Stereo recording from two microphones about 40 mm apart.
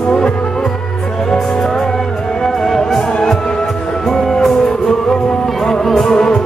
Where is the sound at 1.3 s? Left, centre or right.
Centre.